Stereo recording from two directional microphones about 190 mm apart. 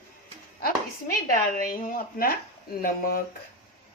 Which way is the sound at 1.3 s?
45° left (ahead or behind).